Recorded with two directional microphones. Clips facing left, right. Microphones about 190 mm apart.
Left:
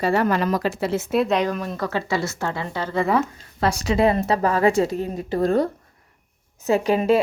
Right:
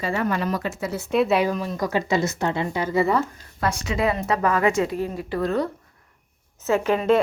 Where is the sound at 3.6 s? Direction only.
35° left (ahead or behind).